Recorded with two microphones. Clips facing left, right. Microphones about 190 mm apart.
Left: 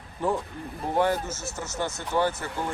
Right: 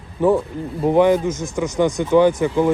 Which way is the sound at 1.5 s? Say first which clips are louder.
Right 14 dB; 15° right (ahead or behind).